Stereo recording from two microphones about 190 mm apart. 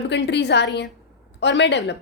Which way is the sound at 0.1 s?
65° left (ahead or behind).